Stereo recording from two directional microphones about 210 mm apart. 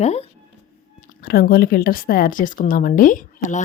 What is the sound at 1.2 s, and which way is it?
Speech, 45° left (ahead or behind).